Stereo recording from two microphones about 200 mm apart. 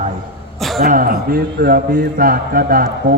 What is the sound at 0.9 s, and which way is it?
A man's voice, 45° right (ahead or behind).